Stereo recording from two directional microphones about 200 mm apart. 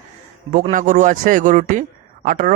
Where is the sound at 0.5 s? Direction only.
40° right (ahead or behind).